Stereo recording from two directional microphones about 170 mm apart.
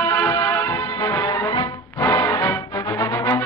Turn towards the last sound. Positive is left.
turn(degrees=20)  # may be behind; listen again after turning